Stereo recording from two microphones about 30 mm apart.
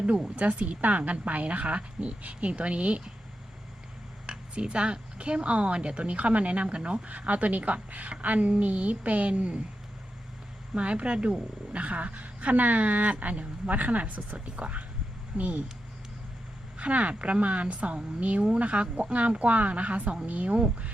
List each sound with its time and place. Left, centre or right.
0.3 s speech: right
4.5 s a woman's voice: right
7.1 s a woman's voice: right
10.8 s a woman's voice: right
14.3 s speech: right
16.7 s speech: right